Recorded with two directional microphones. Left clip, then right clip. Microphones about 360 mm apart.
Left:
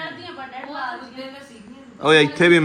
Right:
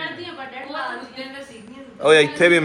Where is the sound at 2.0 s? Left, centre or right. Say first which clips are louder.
Right 1 dB; centre.